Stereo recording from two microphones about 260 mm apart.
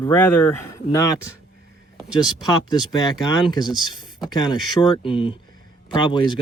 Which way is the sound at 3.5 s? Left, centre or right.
Centre.